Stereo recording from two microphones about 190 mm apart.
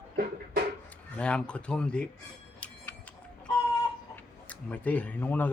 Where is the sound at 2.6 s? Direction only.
5° left (ahead or behind).